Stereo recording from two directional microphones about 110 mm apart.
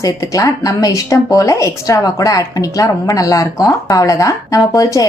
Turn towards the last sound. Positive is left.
turn(degrees=30)  # may be behind; listen again after turning